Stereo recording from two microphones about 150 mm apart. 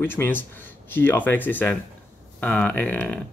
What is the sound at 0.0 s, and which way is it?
Speech, 15° left (ahead or behind).